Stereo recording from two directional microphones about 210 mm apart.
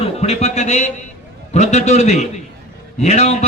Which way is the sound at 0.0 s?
30° left (ahead or behind).